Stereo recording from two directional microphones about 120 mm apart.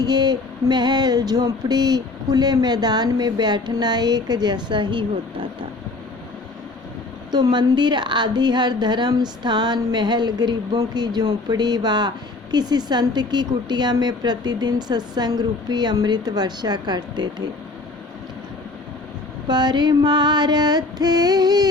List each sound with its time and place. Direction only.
0.0 s a woman's voice: 35° right (ahead or behind)
7.3 s a woman's voice: 35° right (ahead or behind)
19.5 s a woman's voice: 35° right (ahead or behind)